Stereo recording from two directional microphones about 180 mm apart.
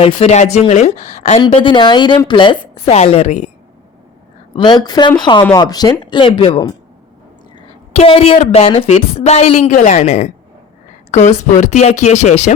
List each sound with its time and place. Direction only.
0.0 s a woman's voice: 35° left (ahead or behind)
1.4 s a woman's voice: 30° left (ahead or behind)
4.5 s a woman's voice: 25° left (ahead or behind)
7.9 s a woman's voice: 30° left (ahead or behind)
11.3 s a woman's voice: 40° left (ahead or behind)